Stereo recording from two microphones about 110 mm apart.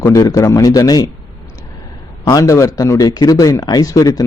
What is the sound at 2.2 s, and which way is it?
A man's voice, 30° left (ahead or behind).